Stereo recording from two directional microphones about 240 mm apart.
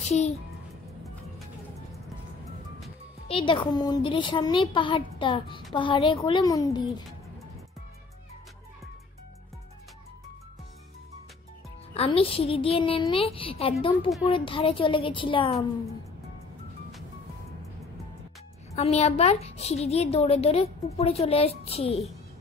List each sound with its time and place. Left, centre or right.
3.3 s a child's voice: left
11.9 s a child's voice: left
18.8 s a child's voice: left